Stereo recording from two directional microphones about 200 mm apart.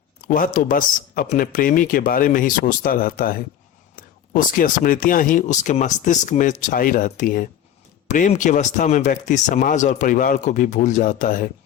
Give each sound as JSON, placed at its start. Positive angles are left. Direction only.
{"t": 0.3, "sound": "speech", "side_deg": 40}